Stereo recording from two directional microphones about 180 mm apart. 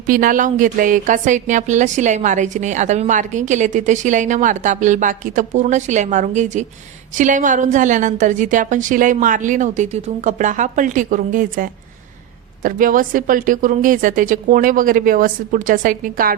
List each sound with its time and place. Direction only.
0.1 s a woman's voice: 50° right (ahead or behind)